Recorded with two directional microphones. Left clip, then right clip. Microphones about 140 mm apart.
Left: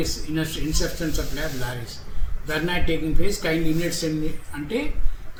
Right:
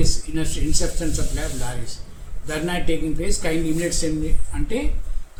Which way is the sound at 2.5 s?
Centre (ahead or behind).